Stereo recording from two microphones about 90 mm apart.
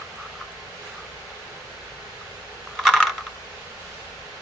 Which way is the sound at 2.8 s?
Centre (ahead or behind).